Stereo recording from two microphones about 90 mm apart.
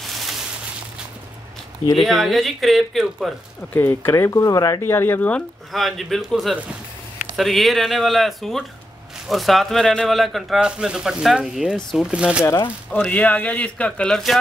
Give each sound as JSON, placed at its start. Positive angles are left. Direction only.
{"t": 2.0, "sound": "speech", "side_deg": 0}
{"t": 3.7, "sound": "speech", "side_deg": 25}
{"t": 4.8, "sound": "speech", "side_deg": 25}
{"t": 5.7, "sound": "speech", "side_deg": 0}
{"t": 12.1, "sound": "speech", "side_deg": -10}
{"t": 13.0, "sound": "speech", "side_deg": 15}